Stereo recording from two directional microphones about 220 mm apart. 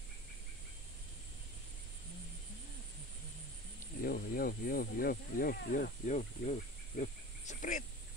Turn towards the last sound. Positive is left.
turn(degrees=35)  # may be behind; listen again after turning